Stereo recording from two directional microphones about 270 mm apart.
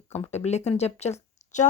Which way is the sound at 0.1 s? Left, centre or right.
Left.